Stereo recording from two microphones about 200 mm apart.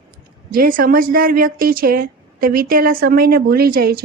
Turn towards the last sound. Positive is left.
turn(degrees=-50)  # may be behind; listen again after turning